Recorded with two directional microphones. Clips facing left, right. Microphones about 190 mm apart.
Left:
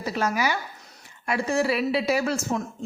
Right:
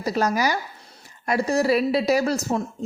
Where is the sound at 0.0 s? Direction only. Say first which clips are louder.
Right 3 dB; 40° right (ahead or behind).